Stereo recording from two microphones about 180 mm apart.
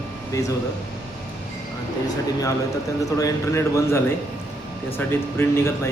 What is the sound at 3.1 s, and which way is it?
A man's voice, 15° left (ahead or behind).